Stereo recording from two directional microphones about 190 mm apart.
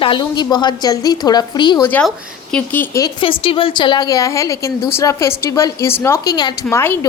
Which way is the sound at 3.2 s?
25° left (ahead or behind).